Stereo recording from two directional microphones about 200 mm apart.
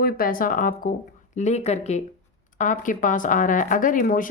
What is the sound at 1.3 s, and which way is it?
Speech, 35° left (ahead or behind).